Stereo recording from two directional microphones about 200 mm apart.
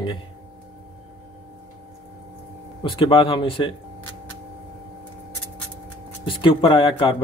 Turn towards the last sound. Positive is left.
turn(degrees=25)  # may be behind; listen again after turning